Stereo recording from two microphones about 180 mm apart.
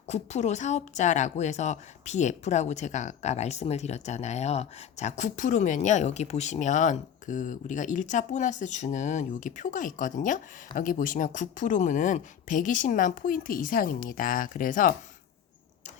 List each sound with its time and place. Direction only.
0.1 s a woman's voice: 40° left (ahead or behind)